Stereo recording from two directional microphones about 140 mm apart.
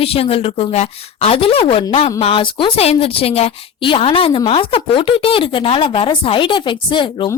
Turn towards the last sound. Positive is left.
turn(degrees=35)  # may be behind; listen again after turning